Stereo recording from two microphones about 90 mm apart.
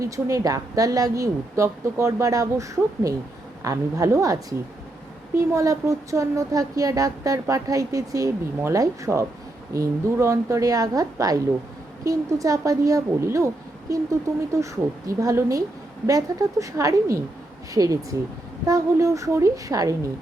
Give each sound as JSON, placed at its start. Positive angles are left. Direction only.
{"t": 0.0, "sound": "speech", "side_deg": -35}